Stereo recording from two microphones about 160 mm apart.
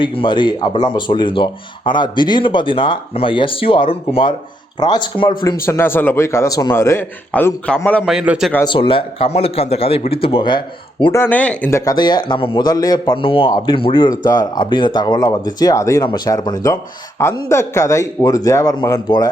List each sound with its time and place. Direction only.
0.0 s speech: 30° left (ahead or behind)
5.4 s a man's voice: 20° left (ahead or behind)
8.0 s a man's voice: 5° right (ahead or behind)
8.6 s speech: 30° left (ahead or behind)
11.1 s a man's voice: 10° left (ahead or behind)
11.9 s speech: 25° left (ahead or behind)